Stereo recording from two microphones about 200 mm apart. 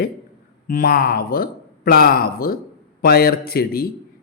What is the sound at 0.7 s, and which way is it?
A man's voice, 45° left (ahead or behind).